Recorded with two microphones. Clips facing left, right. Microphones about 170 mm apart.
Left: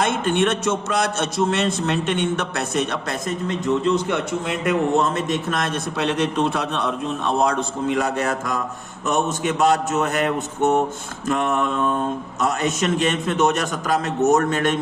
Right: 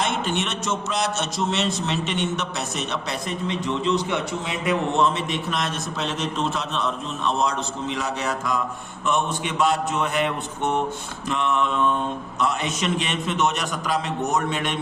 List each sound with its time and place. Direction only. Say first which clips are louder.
0.0 s a man's voice: left 5 dB; 55° left (ahead or behind)